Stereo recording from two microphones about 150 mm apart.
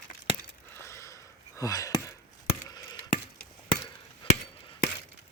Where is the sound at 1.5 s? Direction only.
20° left (ahead or behind).